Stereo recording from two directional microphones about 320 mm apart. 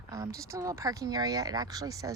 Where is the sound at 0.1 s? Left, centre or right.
Centre.